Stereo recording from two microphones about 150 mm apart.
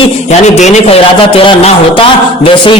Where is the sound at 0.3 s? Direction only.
50° left (ahead or behind).